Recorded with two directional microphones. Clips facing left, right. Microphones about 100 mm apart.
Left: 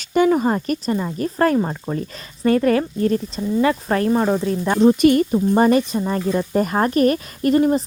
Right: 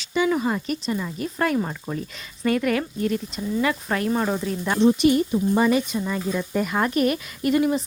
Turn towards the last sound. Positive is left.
turn(degrees=40)  # may be behind; listen again after turning